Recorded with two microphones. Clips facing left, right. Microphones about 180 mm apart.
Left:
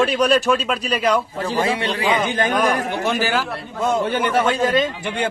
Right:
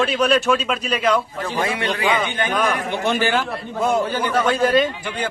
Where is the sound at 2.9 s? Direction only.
5° left (ahead or behind).